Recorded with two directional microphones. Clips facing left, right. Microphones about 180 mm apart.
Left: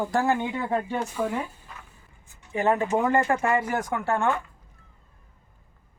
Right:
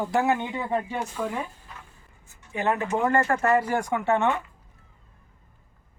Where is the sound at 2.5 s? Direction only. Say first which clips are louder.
Left 3 dB; 25° left (ahead or behind).